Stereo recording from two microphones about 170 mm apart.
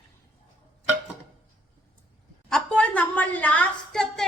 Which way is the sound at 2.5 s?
5° left (ahead or behind).